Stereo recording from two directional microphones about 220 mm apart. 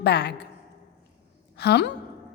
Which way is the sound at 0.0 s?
50° left (ahead or behind).